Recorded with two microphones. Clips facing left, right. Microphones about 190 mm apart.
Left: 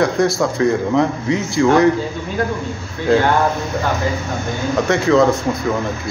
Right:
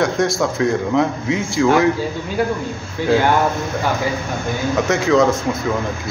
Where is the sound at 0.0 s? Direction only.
Centre (ahead or behind).